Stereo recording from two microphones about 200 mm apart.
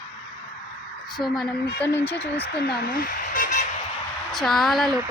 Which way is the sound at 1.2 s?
15° left (ahead or behind).